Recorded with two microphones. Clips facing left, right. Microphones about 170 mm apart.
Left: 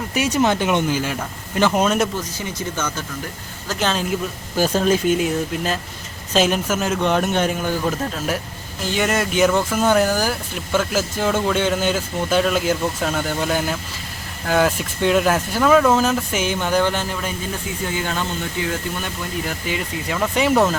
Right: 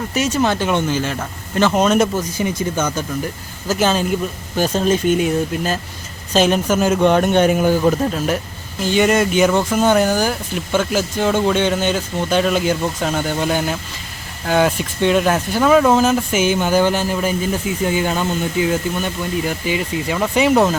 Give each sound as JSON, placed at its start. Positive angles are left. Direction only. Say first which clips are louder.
{"t": 0.1, "sound": "speech", "louder": "even", "side_deg": 10}
{"t": 2.4, "sound": "speech", "louder": "right 8 dB", "side_deg": -15}
{"t": 19.0, "sound": "speech", "louder": "right 5 dB", "side_deg": 0}